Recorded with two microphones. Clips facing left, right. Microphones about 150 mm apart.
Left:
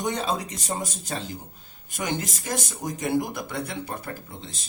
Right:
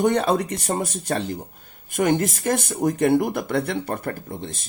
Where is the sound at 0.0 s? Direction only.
60° right (ahead or behind).